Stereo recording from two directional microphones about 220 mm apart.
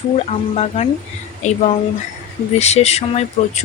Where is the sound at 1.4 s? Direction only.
30° left (ahead or behind).